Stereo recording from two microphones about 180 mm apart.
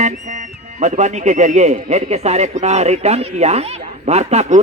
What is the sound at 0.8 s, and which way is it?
A man's voice, 40° right (ahead or behind).